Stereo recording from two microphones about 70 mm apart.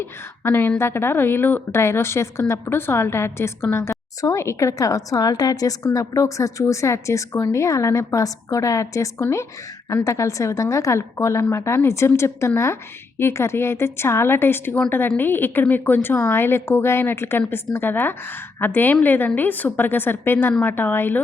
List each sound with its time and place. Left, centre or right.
0.0 s a woman's voice: left